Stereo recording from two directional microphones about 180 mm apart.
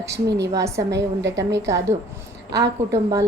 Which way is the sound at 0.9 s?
75° right (ahead or behind).